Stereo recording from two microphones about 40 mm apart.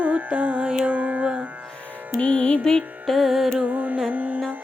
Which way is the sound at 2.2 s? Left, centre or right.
Left.